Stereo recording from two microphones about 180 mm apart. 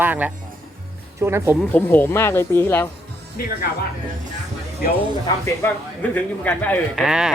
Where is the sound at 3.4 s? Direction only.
55° left (ahead or behind).